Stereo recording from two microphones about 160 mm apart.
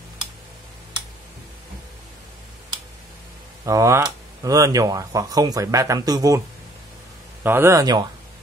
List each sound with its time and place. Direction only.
3.6 s speech: 20° right (ahead or behind)
7.4 s speech: 15° right (ahead or behind)